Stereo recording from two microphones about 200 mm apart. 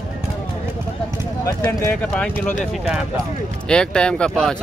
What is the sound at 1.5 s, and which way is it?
Speech, 15° left (ahead or behind).